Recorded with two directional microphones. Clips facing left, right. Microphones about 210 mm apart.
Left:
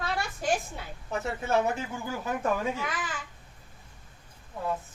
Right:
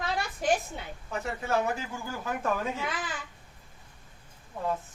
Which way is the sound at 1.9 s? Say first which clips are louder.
Left 2 dB; 20° left (ahead or behind).